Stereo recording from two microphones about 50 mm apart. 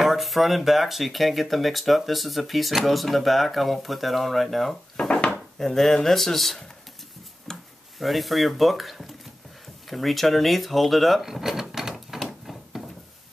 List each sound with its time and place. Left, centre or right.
0.0 s speech: centre
4.9 s wood: centre
5.6 s speech: centre
7.5 s a sound: centre
8.0 s speech: centre
11.6 s typewriter: centre
12.2 s a sound: centre